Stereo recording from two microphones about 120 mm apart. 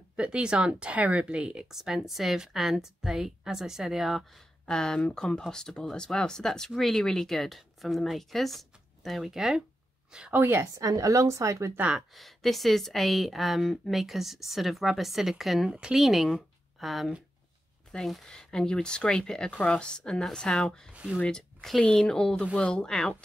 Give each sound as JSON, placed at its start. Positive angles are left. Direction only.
{"t": 0.1, "sound": "a woman's voice", "side_deg": -10}
{"t": 10.4, "sound": "a woman's voice", "side_deg": -20}
{"t": 11.8, "sound": "speech", "side_deg": -5}
{"t": 20.9, "sound": "a woman's voice", "side_deg": -10}
{"t": 21.2, "sound": "speech", "side_deg": 5}